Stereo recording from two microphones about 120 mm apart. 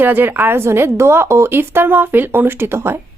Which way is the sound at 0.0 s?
15° right (ahead or behind).